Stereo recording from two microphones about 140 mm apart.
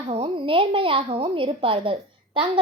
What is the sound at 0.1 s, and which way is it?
A woman's voice, 40° right (ahead or behind).